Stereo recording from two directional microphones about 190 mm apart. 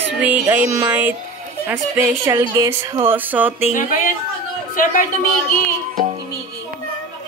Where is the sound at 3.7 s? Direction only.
45° left (ahead or behind).